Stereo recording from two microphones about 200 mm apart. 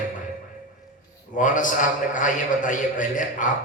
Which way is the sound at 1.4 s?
40° left (ahead or behind).